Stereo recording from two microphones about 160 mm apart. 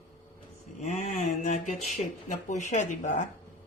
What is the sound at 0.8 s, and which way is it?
Speech, 50° left (ahead or behind).